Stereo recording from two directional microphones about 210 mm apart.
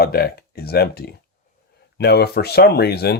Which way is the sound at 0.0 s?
45° left (ahead or behind).